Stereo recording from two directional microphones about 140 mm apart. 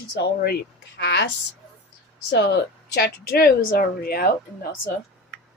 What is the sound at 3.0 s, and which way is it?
Speech, 90° left.